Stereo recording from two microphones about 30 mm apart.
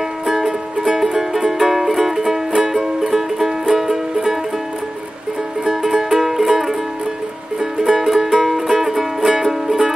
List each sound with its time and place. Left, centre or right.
0.3 s music: centre
3.1 s music: centre
5.7 s music: centre
7.8 s music: centre